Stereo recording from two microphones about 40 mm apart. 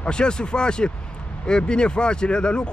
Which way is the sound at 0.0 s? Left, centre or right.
Left.